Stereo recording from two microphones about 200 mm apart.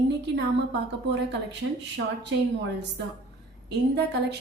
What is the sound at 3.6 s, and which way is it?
Speech, 60° right (ahead or behind).